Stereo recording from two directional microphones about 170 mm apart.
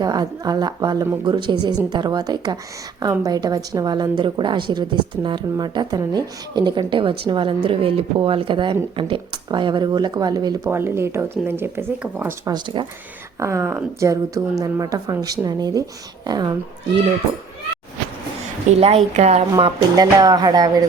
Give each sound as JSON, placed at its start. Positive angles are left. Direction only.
{"t": 0.0, "sound": "speech", "side_deg": -25}
{"t": 12.5, "sound": "speech", "side_deg": -25}
{"t": 13.4, "sound": "speech", "side_deg": -15}
{"t": 18.8, "sound": "speech", "side_deg": -35}